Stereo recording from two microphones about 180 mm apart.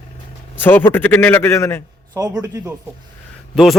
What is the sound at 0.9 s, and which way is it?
Speech, 10° left (ahead or behind).